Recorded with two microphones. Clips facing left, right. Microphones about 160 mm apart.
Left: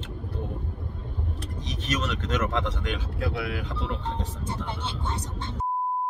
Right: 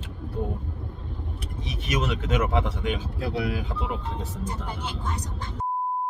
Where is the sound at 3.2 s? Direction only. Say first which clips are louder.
Right 2 dB; 25° right (ahead or behind).